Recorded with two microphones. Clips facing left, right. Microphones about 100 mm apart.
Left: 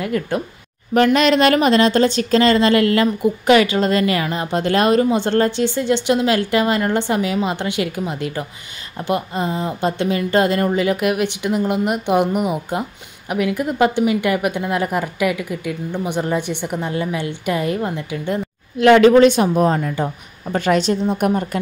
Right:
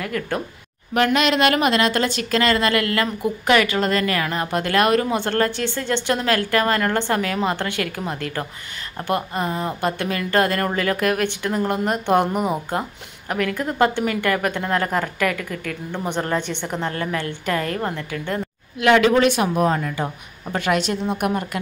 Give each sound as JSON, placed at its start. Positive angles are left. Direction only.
{"t": 0.0, "sound": "speech", "side_deg": 25}
{"t": 0.9, "sound": "a woman's voice", "side_deg": 40}
{"t": 18.8, "sound": "speech", "side_deg": 35}